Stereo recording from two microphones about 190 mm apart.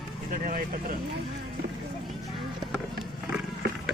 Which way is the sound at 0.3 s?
45° right (ahead or behind).